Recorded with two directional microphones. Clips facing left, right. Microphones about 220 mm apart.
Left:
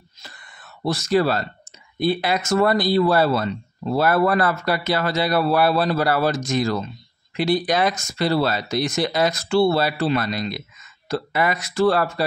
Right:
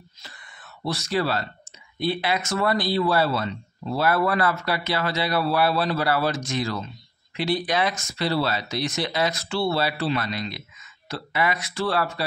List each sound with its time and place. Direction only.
0.8 s speech: 45° left (ahead or behind)